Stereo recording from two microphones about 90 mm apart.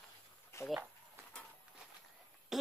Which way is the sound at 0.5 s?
30° left (ahead or behind).